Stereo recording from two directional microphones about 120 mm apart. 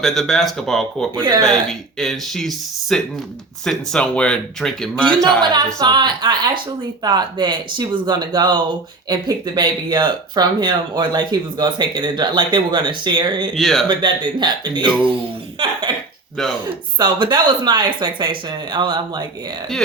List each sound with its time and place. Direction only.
0.0 s speech: centre (ahead or behind)
5.4 s speech: 40° right (ahead or behind)
13.6 s speech: centre (ahead or behind)
13.8 s speech: 40° right (ahead or behind)
17.0 s speech: 40° right (ahead or behind)